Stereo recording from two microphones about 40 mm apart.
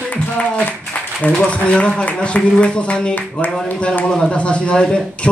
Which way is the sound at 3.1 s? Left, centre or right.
Left.